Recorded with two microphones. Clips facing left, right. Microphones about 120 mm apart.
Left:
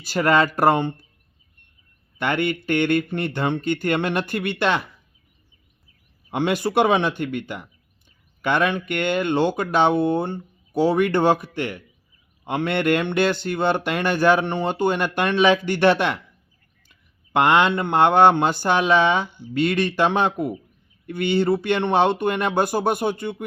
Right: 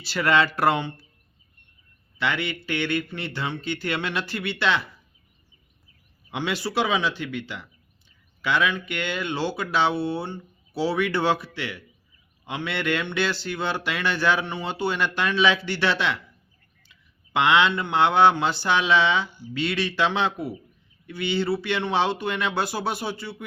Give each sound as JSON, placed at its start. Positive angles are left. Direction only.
{"t": 0.0, "sound": "speech", "side_deg": 45}
{"t": 2.1, "sound": "speech", "side_deg": 50}
{"t": 6.3, "sound": "speech", "side_deg": 50}